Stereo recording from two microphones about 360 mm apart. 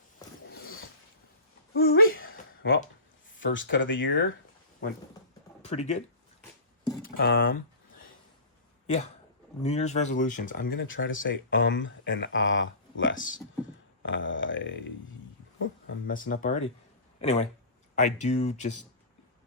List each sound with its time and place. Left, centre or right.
1.7 s a sound: left
3.3 s speech: left
5.6 s speech: centre
7.0 s speech: left
9.6 s speech: centre
14.0 s a sound: left
15.6 s speech: left